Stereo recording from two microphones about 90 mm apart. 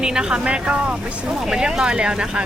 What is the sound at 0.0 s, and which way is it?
Speech, 10° right (ahead or behind).